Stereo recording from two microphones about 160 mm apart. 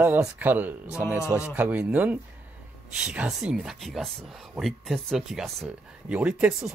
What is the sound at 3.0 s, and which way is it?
Speech, 5° right (ahead or behind).